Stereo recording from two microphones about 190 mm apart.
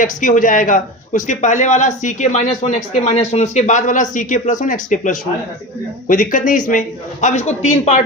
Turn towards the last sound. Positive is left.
turn(degrees=35)  # may be behind; listen again after turning